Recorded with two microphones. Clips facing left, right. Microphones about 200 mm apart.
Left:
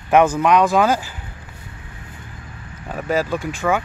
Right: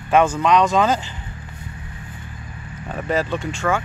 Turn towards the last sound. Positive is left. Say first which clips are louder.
# left 1 dB
turn(degrees=10)  # may be behind; listen again after turning